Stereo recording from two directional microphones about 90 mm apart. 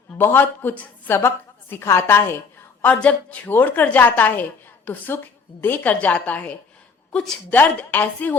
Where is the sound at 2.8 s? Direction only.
15° left (ahead or behind).